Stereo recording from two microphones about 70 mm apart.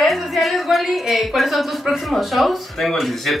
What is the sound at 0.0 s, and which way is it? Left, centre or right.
Speech, centre.